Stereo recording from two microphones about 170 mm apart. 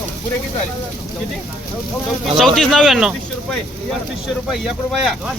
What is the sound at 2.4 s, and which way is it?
Speech, centre (ahead or behind).